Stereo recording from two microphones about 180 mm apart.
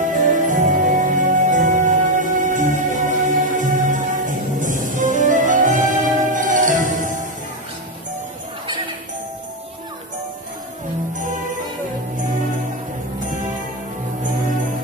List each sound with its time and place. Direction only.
0.0 s music: 45° right (ahead or behind)